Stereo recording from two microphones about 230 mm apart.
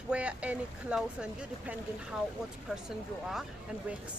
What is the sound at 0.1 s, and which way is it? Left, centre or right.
Speech, centre.